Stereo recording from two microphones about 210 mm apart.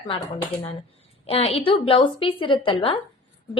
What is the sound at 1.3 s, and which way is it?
A woman's voice, 30° left (ahead or behind).